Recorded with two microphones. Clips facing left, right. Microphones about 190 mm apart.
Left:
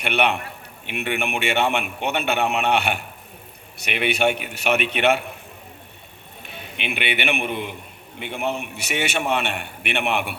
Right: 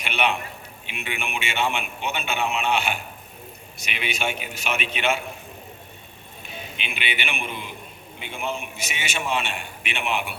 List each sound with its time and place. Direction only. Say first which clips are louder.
0.0 s a man's voice: left 3 dB; 60° left (ahead or behind)
6.4 s a man's voice: left 4 dB; 60° left (ahead or behind)